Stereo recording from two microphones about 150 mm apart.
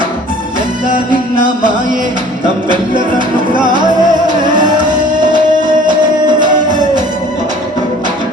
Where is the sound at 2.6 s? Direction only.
30° right (ahead or behind).